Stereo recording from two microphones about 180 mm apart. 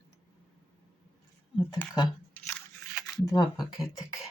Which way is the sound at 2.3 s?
5° left (ahead or behind).